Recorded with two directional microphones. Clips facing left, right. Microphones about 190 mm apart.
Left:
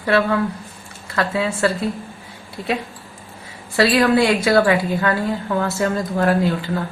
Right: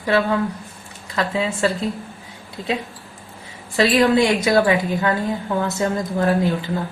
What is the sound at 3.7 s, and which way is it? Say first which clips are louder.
A woman's voice: even; 20° right (ahead or behind).